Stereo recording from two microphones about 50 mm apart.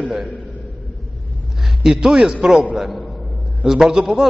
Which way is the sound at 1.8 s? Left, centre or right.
Centre.